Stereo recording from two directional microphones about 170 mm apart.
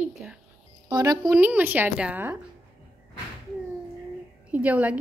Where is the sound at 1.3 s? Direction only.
10° right (ahead or behind).